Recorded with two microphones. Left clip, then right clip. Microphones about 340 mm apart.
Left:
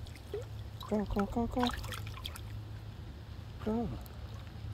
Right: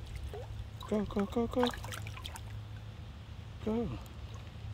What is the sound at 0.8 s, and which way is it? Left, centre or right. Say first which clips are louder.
Speech: even; centre.